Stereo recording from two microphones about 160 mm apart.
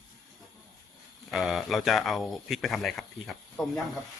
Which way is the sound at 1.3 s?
Centre (ahead or behind).